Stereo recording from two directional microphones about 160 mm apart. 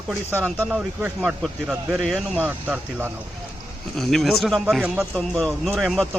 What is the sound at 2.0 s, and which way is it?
Speech, 5° left (ahead or behind).